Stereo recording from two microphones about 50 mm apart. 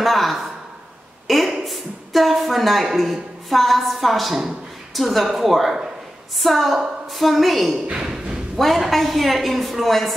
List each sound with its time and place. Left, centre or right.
0.0 s a woman's voice: centre
7.8 s speech: centre
8.5 s a woman's voice: centre